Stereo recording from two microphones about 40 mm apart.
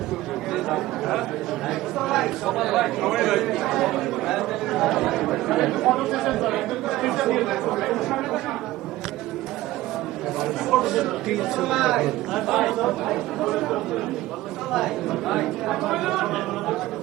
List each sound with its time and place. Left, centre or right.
0.5 s chatter: centre
10.4 s a man's voice: centre